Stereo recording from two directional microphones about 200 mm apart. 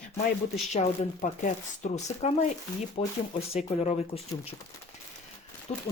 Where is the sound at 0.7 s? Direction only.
40° left (ahead or behind).